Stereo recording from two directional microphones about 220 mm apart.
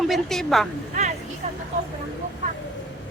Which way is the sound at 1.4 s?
30° right (ahead or behind).